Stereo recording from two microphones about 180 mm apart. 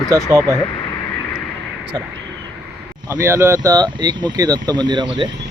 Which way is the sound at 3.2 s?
15° right (ahead or behind).